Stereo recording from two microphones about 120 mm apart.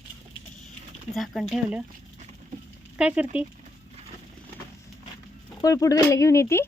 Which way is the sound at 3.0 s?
10° right (ahead or behind).